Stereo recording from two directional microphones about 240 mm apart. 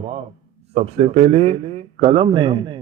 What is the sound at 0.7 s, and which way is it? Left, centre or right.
A man's voice, right.